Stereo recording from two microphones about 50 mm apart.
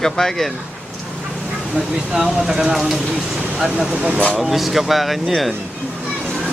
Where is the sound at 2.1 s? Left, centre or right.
Centre.